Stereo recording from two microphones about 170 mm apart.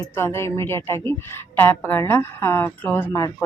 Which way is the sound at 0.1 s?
15° left (ahead or behind).